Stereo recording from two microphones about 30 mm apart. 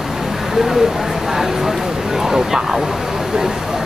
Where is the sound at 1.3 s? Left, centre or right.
Centre.